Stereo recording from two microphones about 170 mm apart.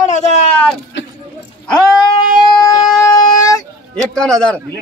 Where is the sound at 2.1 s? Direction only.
25° left (ahead or behind).